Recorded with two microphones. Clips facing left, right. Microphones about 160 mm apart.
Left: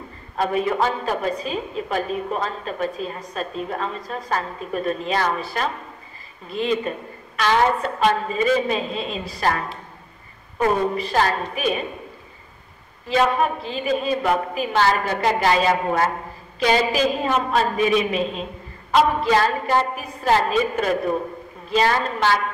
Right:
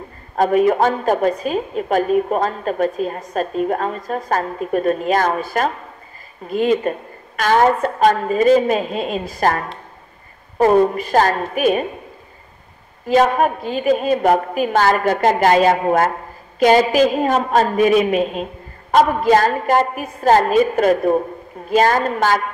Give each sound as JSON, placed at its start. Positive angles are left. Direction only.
{"t": 0.4, "sound": "a woman's voice", "side_deg": -45}
{"t": 10.6, "sound": "a woman's voice", "side_deg": -45}
{"t": 13.1, "sound": "a woman's voice", "side_deg": -45}